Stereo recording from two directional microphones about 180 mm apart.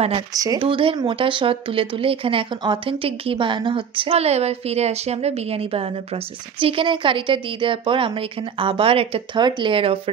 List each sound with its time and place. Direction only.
0.3 s speech: 20° right (ahead or behind)